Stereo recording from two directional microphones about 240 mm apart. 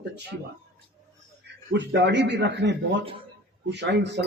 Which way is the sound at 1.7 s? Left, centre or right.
Right.